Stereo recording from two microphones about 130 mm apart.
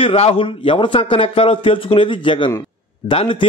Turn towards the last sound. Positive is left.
turn(degrees=45)  # may be behind; listen again after turning